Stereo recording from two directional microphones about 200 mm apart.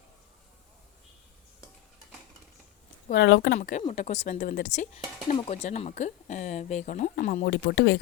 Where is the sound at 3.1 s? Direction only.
65° left (ahead or behind).